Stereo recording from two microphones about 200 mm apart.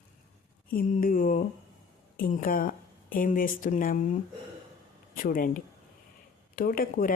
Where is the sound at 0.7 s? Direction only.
45° left (ahead or behind).